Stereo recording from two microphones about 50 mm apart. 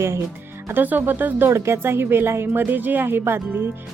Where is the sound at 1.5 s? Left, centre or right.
Right.